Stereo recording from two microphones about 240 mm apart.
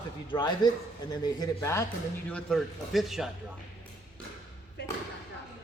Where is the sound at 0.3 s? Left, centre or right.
Centre.